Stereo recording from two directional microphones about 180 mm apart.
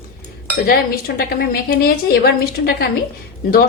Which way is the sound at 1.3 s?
60° left (ahead or behind).